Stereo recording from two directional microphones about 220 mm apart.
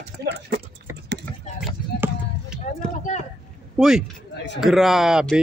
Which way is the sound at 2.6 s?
30° left (ahead or behind).